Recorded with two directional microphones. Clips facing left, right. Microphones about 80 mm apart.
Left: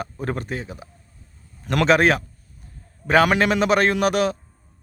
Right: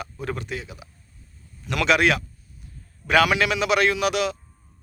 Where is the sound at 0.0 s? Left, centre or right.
Left.